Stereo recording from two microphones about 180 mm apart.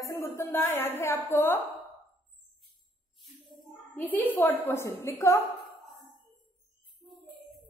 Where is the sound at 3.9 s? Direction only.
10° left (ahead or behind).